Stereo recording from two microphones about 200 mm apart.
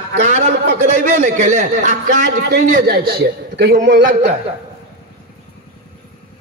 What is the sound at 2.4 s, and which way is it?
A man's voice, 50° right (ahead or behind).